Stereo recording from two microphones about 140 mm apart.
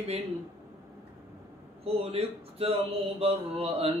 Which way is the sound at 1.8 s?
45° right (ahead or behind).